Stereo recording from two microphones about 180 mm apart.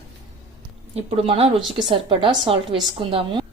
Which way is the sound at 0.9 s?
35° right (ahead or behind).